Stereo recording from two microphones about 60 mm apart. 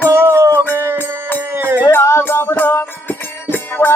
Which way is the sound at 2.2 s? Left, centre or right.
Left.